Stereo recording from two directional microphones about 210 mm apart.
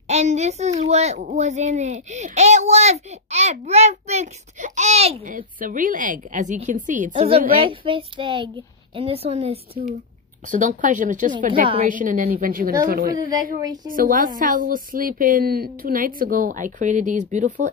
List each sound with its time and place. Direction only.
0.1 s a child's voice: 35° right (ahead or behind)
11.6 s a child's voice: 25° right (ahead or behind)
11.9 s a child's voice: 40° right (ahead or behind)
13.1 s a woman's voice: 20° right (ahead or behind)
13.8 s a child's voice: 40° right (ahead or behind)